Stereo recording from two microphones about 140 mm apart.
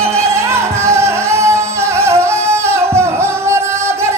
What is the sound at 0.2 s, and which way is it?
Music, 20° right (ahead or behind).